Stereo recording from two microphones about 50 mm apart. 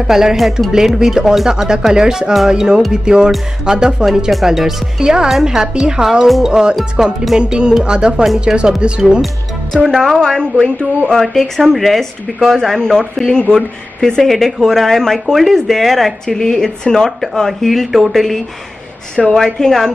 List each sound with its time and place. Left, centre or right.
0.0 s speech: centre
6.2 s speech: centre
6.5 s speech: centre
9.8 s speech: centre
13.3 s speech: centre
17.2 s speech: centre